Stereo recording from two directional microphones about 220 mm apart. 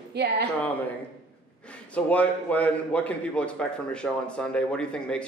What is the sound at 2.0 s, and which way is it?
A man's voice, 5° left (ahead or behind).